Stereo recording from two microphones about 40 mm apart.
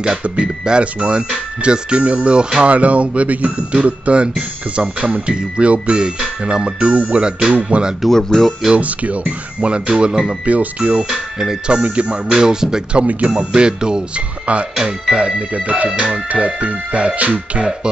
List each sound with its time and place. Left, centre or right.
0.2 s speech: right
6.9 s speech: right
8.1 s speech: centre
8.7 s speech: right
10.4 s speech: right
11.1 s speech: centre
11.6 s speech: right
12.3 s speech: centre
12.9 s speech: right
13.3 s speech: centre; by 17.6 s right